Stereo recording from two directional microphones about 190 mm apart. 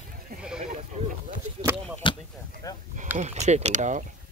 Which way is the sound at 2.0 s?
25° left (ahead or behind).